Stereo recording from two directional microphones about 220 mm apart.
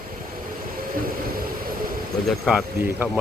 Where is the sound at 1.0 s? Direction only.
40° right (ahead or behind).